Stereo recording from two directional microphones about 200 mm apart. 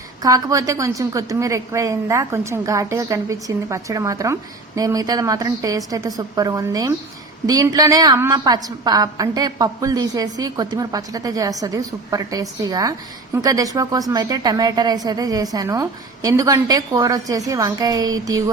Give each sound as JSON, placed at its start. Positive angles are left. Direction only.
{"t": 0.2, "sound": "a woman's voice", "side_deg": -15}